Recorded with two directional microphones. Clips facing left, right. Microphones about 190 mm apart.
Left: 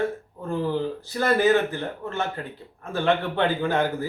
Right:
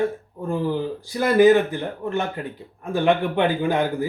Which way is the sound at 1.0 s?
15° right (ahead or behind).